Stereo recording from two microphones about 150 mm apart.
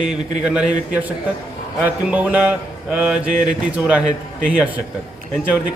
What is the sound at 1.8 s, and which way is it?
A man's voice, 10° right (ahead or behind).